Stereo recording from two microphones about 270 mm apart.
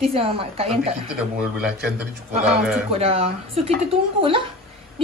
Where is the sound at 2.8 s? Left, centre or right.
Right.